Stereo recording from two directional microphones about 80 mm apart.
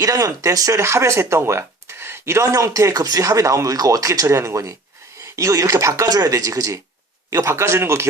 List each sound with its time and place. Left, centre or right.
0.0 s speech: right